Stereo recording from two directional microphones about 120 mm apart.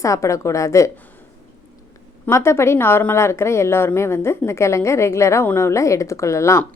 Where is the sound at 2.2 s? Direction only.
20° left (ahead or behind).